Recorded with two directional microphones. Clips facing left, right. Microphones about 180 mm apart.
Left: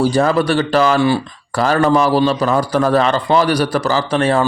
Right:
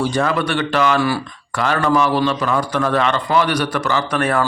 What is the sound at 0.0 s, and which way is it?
A man's voice, 35° left (ahead or behind).